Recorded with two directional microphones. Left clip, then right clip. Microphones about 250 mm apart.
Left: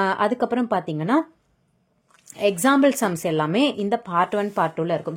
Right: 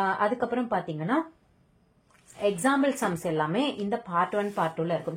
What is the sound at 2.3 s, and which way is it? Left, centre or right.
A woman's voice, left.